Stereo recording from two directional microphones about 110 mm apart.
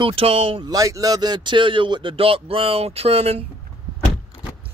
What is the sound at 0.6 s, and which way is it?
Speech, 30° right (ahead or behind).